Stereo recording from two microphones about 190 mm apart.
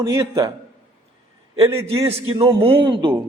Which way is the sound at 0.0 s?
15° right (ahead or behind).